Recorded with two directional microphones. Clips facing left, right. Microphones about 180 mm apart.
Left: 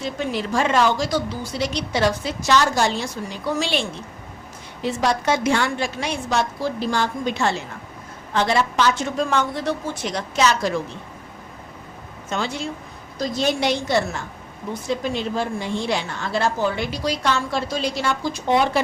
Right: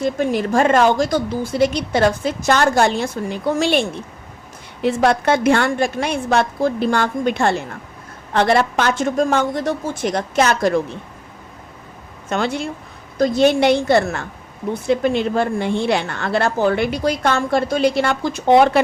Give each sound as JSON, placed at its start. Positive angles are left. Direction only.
{"t": 0.0, "sound": "a woman's voice", "side_deg": -50}
{"t": 12.3, "sound": "a woman's voice", "side_deg": -60}